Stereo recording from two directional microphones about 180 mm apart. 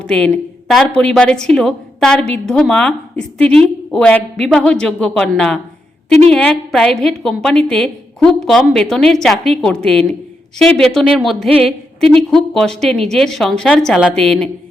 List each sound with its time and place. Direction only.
0.1 s a woman's voice: 5° left (ahead or behind)